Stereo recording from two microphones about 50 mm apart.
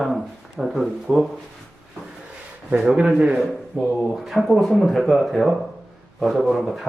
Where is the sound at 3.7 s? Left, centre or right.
Right.